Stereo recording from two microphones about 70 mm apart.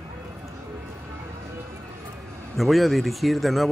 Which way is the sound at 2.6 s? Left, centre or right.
Centre.